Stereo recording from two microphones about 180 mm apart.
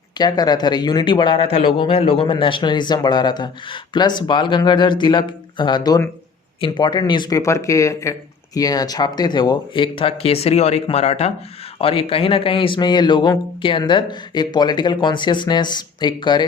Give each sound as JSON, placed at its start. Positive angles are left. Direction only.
{"t": 0.2, "sound": "speech", "side_deg": 20}